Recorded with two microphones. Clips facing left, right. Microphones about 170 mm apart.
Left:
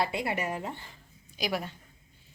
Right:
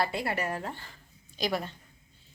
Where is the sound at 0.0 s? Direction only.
20° left (ahead or behind).